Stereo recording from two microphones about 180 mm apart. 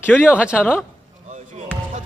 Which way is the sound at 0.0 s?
10° left (ahead or behind).